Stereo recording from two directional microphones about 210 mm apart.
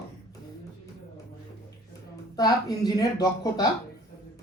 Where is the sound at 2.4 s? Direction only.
20° left (ahead or behind).